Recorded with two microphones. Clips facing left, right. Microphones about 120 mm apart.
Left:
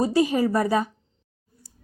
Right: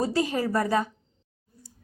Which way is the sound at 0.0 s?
15° left (ahead or behind).